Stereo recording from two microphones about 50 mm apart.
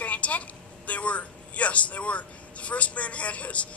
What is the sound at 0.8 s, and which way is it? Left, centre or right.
Speech, left.